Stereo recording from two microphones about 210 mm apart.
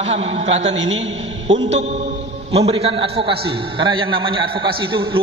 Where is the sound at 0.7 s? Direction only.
65° right (ahead or behind).